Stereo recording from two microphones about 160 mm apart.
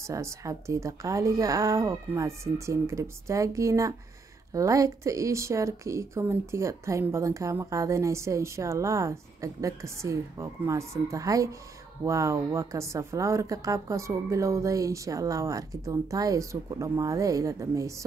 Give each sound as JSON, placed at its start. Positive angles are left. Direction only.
{"t": 0.0, "sound": "speech", "side_deg": -15}